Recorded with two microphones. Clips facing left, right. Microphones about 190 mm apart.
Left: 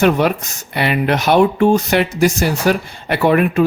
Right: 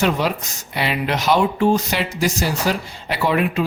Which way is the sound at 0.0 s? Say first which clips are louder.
Left 6 dB; 55° left (ahead or behind).